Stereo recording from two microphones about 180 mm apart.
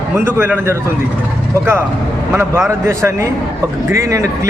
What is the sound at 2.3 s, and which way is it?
A man's voice, 15° right (ahead or behind).